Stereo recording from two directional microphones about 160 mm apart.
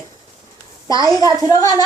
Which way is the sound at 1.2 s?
20° left (ahead or behind).